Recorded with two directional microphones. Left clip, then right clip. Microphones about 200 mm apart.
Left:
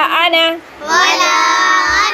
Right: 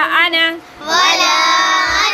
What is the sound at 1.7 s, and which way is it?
Music, 55° right (ahead or behind).